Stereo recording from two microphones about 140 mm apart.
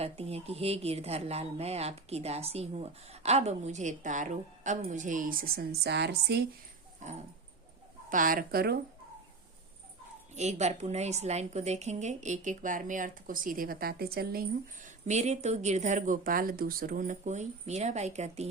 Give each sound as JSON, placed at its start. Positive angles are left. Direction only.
{"t": 0.0, "sound": "a woman's voice", "side_deg": -45}
{"t": 7.0, "sound": "dog", "side_deg": -55}
{"t": 8.1, "sound": "speech", "side_deg": -80}
{"t": 10.3, "sound": "a woman's voice", "side_deg": -55}